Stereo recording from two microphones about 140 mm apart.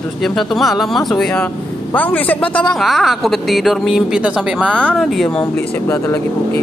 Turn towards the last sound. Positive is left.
turn(degrees=20)  # may be behind; listen again after turning